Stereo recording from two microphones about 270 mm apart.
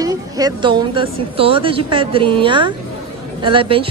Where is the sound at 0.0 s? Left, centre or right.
Centre.